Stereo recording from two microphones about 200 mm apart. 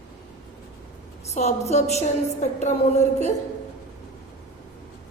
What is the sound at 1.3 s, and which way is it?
A woman's voice, 35° left (ahead or behind).